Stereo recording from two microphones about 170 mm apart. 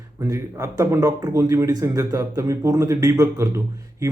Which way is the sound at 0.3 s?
20° right (ahead or behind).